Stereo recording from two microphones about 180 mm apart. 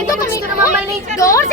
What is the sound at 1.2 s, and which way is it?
Speech, 15° left (ahead or behind).